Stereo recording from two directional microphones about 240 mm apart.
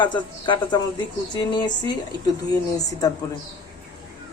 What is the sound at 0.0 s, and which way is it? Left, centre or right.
Speech, centre.